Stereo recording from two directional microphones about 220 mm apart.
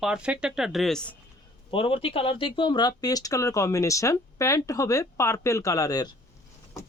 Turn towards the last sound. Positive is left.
turn(degrees=15)  # may be behind; listen again after turning